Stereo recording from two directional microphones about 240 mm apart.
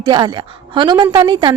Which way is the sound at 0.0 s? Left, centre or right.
Centre.